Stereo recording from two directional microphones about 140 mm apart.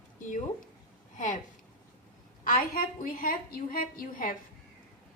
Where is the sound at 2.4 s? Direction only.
80° left.